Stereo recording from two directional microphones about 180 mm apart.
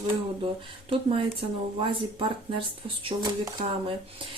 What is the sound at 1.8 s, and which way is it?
Speech, 30° right (ahead or behind).